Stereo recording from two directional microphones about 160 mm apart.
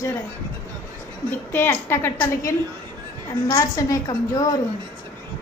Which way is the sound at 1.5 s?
15° left (ahead or behind).